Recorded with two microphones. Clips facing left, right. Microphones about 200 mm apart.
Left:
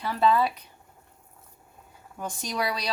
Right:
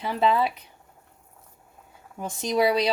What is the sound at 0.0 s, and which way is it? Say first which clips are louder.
Speech: even; 20° right (ahead or behind).